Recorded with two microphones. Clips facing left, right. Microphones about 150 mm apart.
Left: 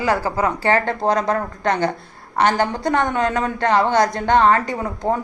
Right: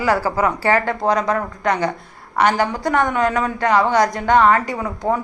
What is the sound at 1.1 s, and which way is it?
Speech, 45° left (ahead or behind).